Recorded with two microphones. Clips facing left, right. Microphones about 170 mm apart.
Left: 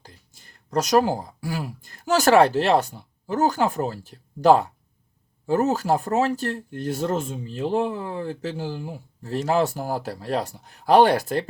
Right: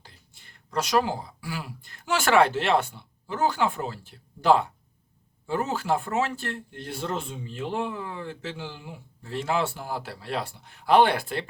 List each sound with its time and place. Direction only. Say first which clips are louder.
0.0 s speech: left 4 dB; 40° left (ahead or behind)